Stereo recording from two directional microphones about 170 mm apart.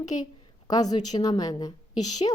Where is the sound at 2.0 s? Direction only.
45° left (ahead or behind).